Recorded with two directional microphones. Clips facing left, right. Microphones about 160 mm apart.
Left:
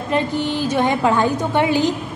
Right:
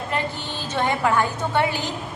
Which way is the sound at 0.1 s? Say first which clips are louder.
Left 10 dB; 15° left (ahead or behind).